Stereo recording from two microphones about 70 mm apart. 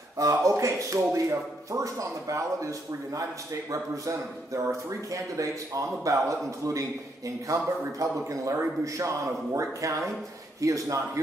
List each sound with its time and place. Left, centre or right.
0.2 s speech: right